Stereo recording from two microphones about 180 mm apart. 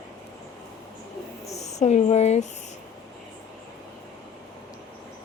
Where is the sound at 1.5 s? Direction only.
40° left (ahead or behind).